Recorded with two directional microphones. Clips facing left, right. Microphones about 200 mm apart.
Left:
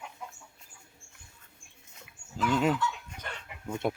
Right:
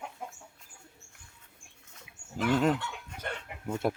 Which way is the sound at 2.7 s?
55° right (ahead or behind).